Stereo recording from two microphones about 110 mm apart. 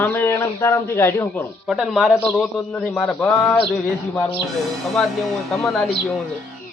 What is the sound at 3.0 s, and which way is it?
Speech, 10° left (ahead or behind).